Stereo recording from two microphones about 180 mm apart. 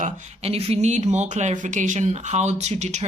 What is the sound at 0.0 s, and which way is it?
Speech, 35° right (ahead or behind).